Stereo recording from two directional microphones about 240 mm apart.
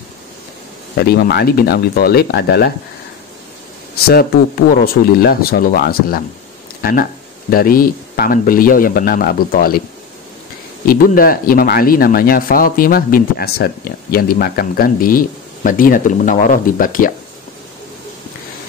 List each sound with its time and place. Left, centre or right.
0.9 s a man's voice: left
4.7 s a man's voice: left
10.9 s a man's voice: left